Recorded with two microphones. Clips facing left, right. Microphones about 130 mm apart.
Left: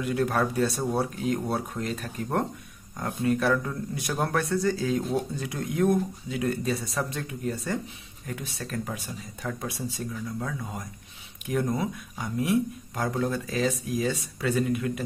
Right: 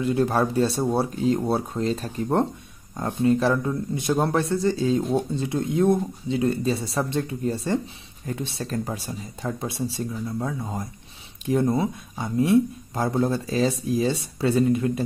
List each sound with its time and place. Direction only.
0.0 s speech: 30° right (ahead or behind)